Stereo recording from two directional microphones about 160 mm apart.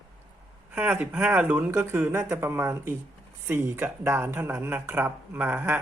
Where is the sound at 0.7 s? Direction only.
10° right (ahead or behind).